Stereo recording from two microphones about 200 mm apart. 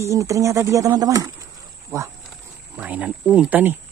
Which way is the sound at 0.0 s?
15° right (ahead or behind).